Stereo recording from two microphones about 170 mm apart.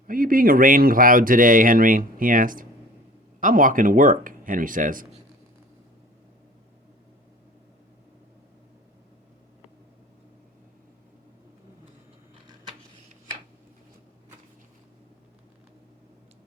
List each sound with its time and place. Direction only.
0.1 s speech: 55° right (ahead or behind)